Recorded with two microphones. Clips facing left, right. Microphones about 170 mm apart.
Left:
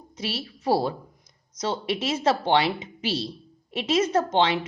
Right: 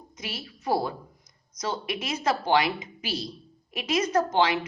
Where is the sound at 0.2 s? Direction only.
30° left (ahead or behind).